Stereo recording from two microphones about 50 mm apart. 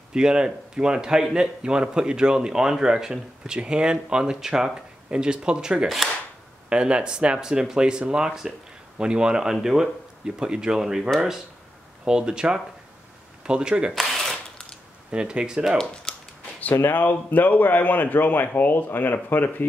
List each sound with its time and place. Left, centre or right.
0.1 s speech: centre
12.1 s speech: centre
13.9 s camera: centre
15.0 s speech: centre
16.1 s a sound: centre
16.7 s speech: left